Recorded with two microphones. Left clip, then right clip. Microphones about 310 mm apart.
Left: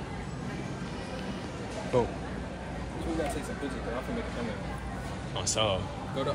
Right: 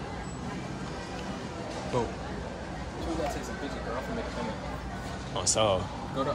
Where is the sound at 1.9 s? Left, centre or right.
Centre.